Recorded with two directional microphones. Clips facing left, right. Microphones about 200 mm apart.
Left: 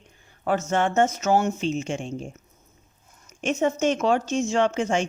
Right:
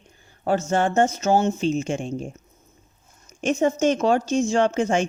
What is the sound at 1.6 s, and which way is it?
Speech, 40° right (ahead or behind).